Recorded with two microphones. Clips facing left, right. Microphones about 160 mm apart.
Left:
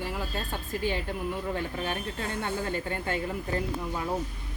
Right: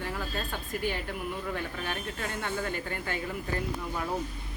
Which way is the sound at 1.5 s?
25° left (ahead or behind).